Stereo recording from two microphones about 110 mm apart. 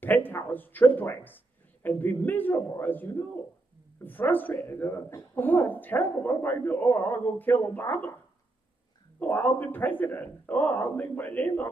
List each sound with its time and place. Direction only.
0.0 s speech: 15° left (ahead or behind)
9.2 s speech: 15° left (ahead or behind)